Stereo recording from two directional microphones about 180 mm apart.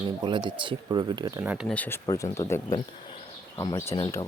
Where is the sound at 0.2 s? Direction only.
25° right (ahead or behind).